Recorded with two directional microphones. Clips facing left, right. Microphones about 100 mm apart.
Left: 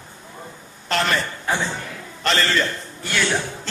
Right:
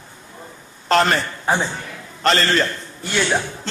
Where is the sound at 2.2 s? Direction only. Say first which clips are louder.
Right 3 dB; 45° right (ahead or behind).